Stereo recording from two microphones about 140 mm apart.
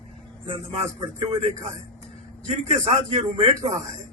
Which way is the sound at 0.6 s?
50° right (ahead or behind).